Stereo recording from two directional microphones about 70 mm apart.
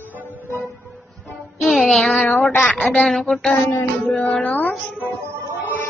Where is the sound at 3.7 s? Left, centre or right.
Left.